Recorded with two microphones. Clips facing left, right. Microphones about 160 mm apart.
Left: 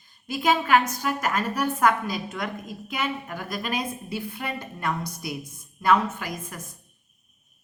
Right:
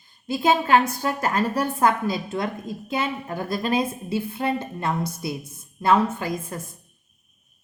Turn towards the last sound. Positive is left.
turn(degrees=-30)  # may be behind; listen again after turning